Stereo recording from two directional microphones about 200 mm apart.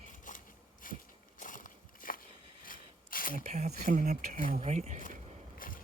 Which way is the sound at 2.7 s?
45° left (ahead or behind).